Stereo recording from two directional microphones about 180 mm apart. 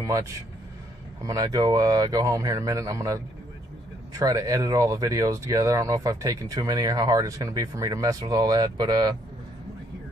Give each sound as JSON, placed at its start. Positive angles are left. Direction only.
{"t": 0.0, "sound": "speech", "side_deg": -15}